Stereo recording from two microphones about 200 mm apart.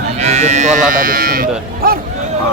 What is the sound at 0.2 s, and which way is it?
Speech, 35° right (ahead or behind).